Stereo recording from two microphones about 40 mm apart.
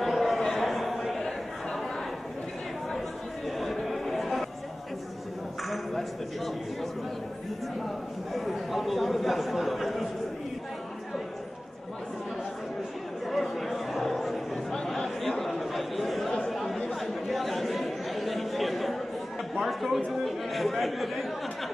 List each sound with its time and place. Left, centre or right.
0.0 s a sound: centre
0.4 s chatter: centre
1.1 s chatter: centre
3.4 s chatter: centre
5.7 s a sound: centre
8.3 s chatter: centre
13.3 s chatter: centre
14.5 s chatter: centre
20.1 s speech: centre